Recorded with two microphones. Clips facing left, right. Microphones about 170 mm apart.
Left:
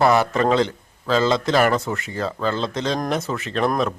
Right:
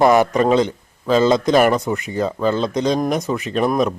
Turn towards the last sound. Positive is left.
turn(degrees=-15)  # may be behind; listen again after turning